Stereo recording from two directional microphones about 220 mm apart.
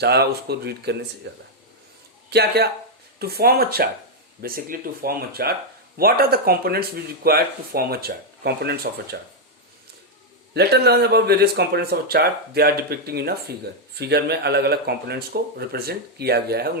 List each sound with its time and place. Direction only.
0.0 s speech: 45° right (ahead or behind)
10.5 s speech: 45° right (ahead or behind)